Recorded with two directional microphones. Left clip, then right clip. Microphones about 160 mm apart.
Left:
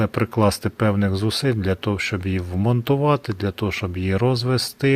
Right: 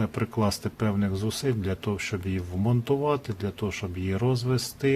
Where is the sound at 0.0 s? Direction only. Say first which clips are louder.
Left 8 dB; 45° left (ahead or behind).